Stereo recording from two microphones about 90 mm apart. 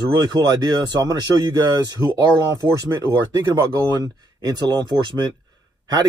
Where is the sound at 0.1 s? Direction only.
50° right (ahead or behind).